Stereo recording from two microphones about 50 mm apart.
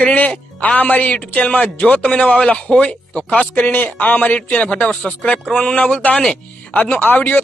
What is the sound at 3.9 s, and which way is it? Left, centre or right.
Speech, left.